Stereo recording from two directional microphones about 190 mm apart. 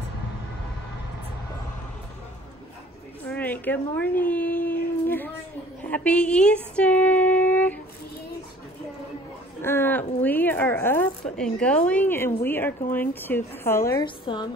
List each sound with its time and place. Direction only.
3.3 s a sound: 10° left (ahead or behind)
9.6 s a woman's voice: 10° left (ahead or behind)
14.0 s a woman's voice: 25° left (ahead or behind)